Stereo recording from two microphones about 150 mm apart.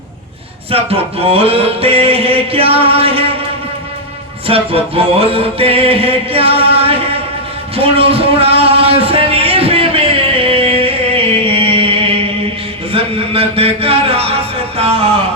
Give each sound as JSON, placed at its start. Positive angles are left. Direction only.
{"t": 0.7, "sound": "music", "side_deg": -40}
{"t": 4.4, "sound": "music", "side_deg": -40}
{"t": 6.7, "sound": "chant", "side_deg": -40}
{"t": 7.8, "sound": "a sound", "side_deg": -40}